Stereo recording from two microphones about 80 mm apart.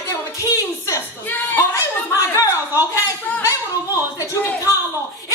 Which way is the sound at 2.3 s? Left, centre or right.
Left.